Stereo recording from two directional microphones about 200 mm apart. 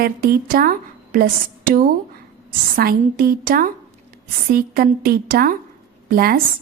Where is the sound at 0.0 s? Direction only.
50° right (ahead or behind).